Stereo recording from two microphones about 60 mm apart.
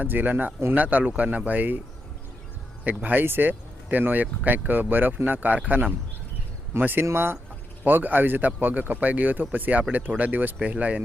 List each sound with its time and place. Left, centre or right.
0.0 s speech: right
3.0 s speech: right
7.0 s speech: right
7.9 s speech: right